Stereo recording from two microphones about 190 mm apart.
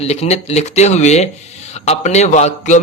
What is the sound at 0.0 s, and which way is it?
Speech, 35° left (ahead or behind).